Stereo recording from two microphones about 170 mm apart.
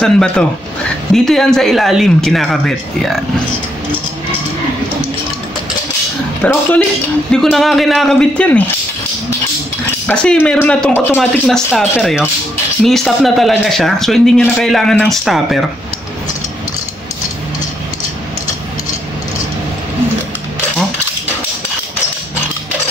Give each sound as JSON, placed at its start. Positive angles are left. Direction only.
{"t": 0.0, "sound": "speech", "side_deg": 5}
{"t": 6.4, "sound": "speech", "side_deg": 10}
{"t": 10.0, "sound": "speech", "side_deg": 5}